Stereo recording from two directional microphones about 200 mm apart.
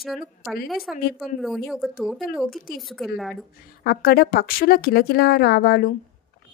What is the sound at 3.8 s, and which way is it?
A woman's voice, 50° left (ahead or behind).